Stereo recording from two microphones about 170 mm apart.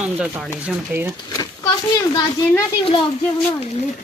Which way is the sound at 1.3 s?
20° left (ahead or behind).